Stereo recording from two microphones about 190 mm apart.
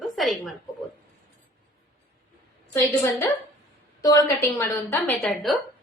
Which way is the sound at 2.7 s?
15° left (ahead or behind).